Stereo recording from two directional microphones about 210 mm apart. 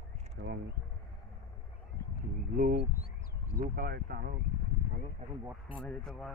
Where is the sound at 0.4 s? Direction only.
60° right (ahead or behind).